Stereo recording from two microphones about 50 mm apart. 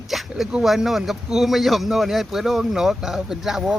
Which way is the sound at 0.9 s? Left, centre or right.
Centre.